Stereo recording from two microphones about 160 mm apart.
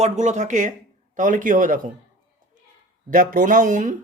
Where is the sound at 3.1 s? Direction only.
60° right (ahead or behind).